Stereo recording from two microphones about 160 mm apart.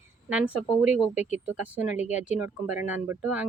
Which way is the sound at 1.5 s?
10° right (ahead or behind).